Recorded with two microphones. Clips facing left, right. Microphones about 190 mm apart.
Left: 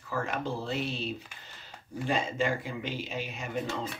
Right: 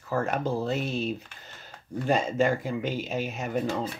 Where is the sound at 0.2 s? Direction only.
45° right (ahead or behind).